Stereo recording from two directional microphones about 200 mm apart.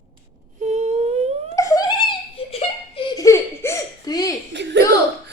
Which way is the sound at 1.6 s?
15° left (ahead or behind).